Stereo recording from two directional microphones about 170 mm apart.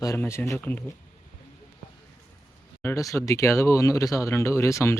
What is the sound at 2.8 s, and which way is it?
Speech, 15° left (ahead or behind).